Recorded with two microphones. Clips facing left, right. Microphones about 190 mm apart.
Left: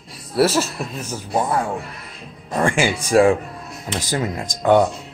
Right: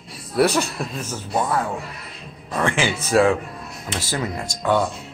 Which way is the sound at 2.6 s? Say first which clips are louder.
Left 3 dB; 10° left (ahead or behind).